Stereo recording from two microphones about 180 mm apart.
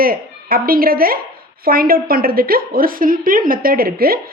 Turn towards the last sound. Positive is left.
turn(degrees=-55)  # may be behind; listen again after turning